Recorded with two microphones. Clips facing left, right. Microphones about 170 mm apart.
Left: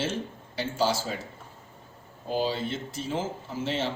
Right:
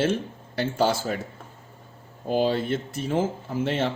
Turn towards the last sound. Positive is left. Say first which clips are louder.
# right 4 dB
turn(degrees=-55)  # may be behind; listen again after turning